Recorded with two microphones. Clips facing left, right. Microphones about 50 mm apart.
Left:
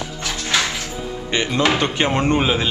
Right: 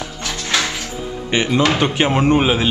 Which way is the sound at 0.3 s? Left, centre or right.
Centre.